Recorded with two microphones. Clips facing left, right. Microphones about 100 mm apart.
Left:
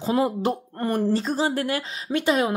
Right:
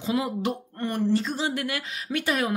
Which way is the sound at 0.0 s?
35° left (ahead or behind).